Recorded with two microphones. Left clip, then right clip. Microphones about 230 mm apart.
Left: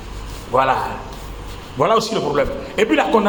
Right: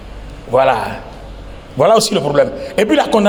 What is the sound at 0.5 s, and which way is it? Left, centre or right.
Speech, right.